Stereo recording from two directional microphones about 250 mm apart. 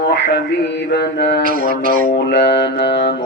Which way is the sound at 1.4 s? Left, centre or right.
Right.